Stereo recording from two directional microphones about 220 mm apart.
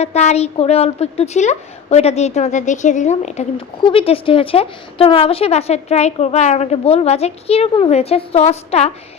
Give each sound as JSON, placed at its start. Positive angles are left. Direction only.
{"t": 0.0, "sound": "a woman's voice", "side_deg": 30}